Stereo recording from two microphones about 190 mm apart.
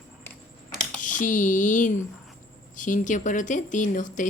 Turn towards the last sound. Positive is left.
turn(degrees=40)  # may be behind; listen again after turning